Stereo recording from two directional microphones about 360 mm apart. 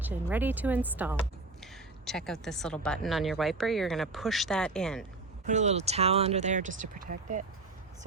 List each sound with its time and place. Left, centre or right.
0.0 s a woman's voice: centre
5.5 s speech: centre